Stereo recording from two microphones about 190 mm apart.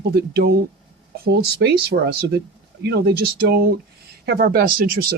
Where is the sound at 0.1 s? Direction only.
55° right (ahead or behind).